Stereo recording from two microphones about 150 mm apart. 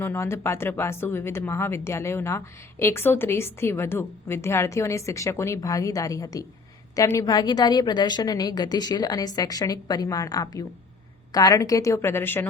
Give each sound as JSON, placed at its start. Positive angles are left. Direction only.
{"t": 0.0, "sound": "a woman's voice", "side_deg": 15}